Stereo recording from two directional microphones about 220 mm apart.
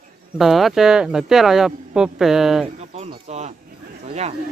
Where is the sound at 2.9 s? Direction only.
30° right (ahead or behind).